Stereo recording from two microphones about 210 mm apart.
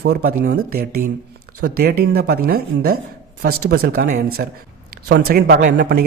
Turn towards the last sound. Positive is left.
turn(degrees=-45)  # may be behind; listen again after turning